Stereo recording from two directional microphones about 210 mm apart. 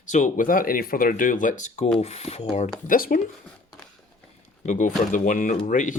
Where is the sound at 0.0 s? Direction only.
35° left (ahead or behind).